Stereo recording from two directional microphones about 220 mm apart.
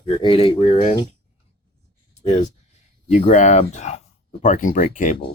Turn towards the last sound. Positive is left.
turn(degrees=35)  # may be behind; listen again after turning